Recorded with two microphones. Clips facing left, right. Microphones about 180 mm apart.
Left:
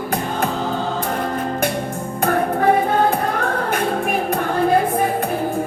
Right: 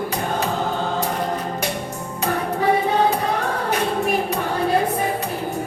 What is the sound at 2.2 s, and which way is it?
Music, 50° left (ahead or behind).